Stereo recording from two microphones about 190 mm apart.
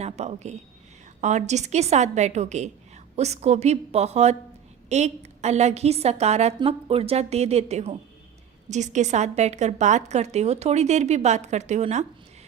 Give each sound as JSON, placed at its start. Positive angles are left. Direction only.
{"t": 0.0, "sound": "a woman's voice", "side_deg": -35}